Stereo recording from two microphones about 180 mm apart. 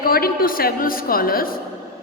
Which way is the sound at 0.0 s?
55° left (ahead or behind).